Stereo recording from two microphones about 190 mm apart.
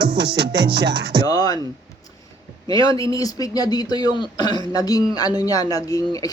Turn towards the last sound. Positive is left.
turn(degrees=20)  # may be behind; listen again after turning